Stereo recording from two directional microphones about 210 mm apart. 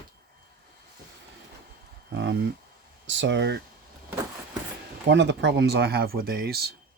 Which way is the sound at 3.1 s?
60° right (ahead or behind).